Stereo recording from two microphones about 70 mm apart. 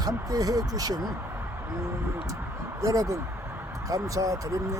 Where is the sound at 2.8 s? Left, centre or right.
Right.